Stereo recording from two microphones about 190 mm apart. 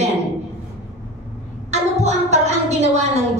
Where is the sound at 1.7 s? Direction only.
35° right (ahead or behind).